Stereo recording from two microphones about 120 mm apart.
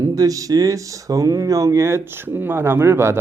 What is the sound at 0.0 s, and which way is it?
Speech, 30° right (ahead or behind).